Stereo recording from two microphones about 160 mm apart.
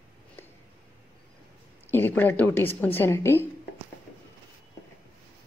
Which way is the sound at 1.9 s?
15° left (ahead or behind).